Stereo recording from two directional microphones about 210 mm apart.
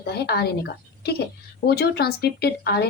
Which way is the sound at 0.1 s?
50° left (ahead or behind).